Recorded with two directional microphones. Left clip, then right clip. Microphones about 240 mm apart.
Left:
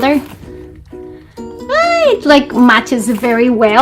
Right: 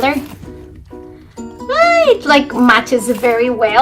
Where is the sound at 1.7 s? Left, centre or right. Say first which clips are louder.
Even; left.